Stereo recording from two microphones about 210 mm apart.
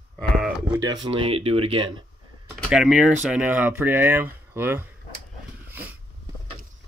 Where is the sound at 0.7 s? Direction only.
20° right (ahead or behind).